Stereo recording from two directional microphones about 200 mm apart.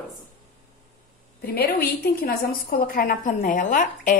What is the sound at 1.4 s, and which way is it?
A woman's voice, 50° left (ahead or behind).